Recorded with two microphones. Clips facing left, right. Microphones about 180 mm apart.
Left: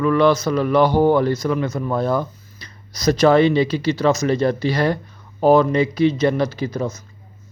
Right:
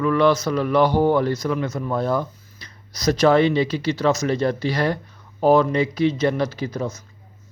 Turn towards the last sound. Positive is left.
turn(degrees=25)  # may be behind; listen again after turning